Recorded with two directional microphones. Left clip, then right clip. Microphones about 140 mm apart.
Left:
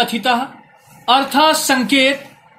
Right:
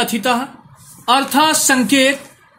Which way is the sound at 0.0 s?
50° right (ahead or behind).